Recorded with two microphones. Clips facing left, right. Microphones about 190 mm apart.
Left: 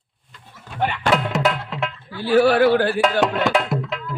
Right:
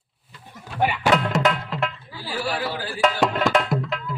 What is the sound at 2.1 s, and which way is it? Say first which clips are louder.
Speech: left 15 dB; 60° left (ahead or behind).